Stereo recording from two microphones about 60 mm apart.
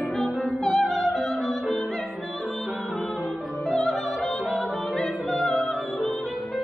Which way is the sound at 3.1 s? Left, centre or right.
Centre.